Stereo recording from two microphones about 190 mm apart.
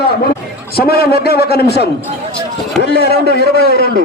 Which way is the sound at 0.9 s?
55° left (ahead or behind).